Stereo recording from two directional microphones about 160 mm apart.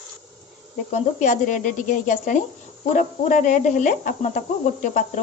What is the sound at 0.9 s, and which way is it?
Speech, 50° left (ahead or behind).